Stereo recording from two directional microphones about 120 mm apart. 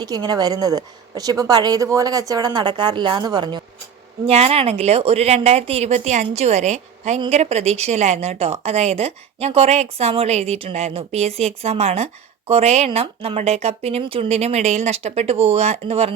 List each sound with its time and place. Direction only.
0.0 s a woman's voice: 35° right (ahead or behind)
4.3 s a woman's voice: 55° right (ahead or behind)